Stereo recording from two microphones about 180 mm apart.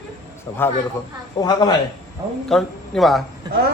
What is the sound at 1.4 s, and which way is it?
Speech, 25° left (ahead or behind).